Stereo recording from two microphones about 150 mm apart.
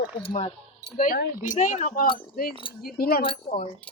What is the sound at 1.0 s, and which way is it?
Speech, 70° left (ahead or behind).